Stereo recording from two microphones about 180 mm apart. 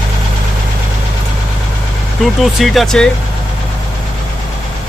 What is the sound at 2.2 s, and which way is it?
Speech, centre (ahead or behind).